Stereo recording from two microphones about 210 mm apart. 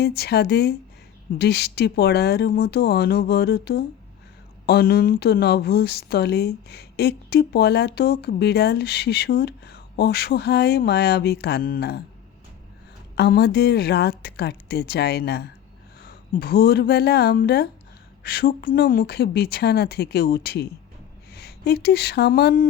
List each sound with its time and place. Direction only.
0.0 s speech: 50° left (ahead or behind)
13.1 s speech: 50° left (ahead or behind)